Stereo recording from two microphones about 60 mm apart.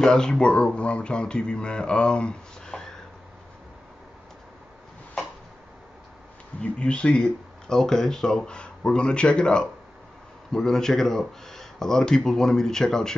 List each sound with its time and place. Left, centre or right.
0.0 s speech: centre
6.6 s speech: centre